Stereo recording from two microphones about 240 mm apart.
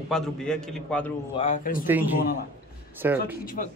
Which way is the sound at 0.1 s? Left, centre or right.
Centre.